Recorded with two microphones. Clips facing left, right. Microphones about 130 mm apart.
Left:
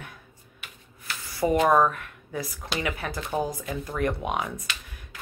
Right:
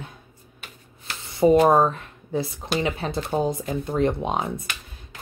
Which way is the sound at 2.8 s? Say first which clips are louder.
Right 5 dB; 25° right (ahead or behind).